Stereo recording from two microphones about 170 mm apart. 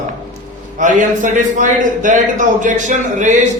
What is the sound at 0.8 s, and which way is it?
A man's voice, 50° right (ahead or behind).